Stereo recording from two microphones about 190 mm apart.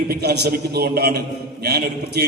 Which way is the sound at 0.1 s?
60° right (ahead or behind).